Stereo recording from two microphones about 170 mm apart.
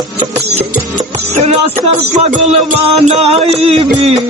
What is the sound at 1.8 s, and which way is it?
Music, 40° right (ahead or behind).